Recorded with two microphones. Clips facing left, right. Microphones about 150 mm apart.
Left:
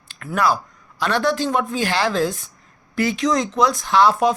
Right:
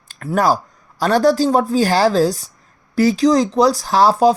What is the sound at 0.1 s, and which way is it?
Speech, 40° right (ahead or behind).